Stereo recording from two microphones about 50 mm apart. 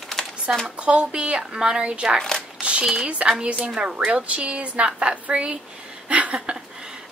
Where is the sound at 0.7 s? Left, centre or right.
Right.